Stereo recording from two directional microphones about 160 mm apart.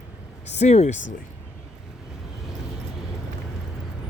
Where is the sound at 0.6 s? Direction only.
45° left (ahead or behind).